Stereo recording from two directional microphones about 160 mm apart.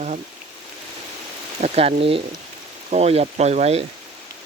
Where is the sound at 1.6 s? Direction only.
40° right (ahead or behind).